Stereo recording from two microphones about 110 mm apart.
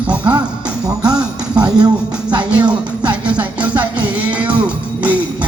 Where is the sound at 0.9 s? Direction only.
35° right (ahead or behind).